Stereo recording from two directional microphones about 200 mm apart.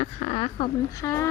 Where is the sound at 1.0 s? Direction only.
15° left (ahead or behind).